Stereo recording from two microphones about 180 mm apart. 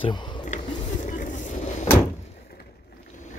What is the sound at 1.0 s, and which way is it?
Vehicle, 45° left (ahead or behind).